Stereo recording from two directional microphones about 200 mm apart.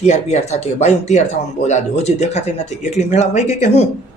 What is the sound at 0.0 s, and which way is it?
Speech, 35° left (ahead or behind).